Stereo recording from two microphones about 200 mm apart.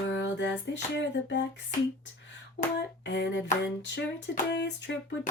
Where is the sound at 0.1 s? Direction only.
65° left (ahead or behind).